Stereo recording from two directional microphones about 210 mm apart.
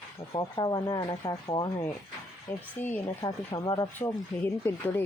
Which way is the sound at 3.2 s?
20° left (ahead or behind).